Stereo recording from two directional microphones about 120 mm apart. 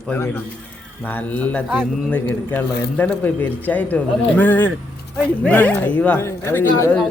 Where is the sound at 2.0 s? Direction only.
15° left (ahead or behind).